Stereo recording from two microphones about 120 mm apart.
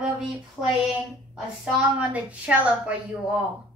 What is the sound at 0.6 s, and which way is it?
A woman's voice, 5° right (ahead or behind).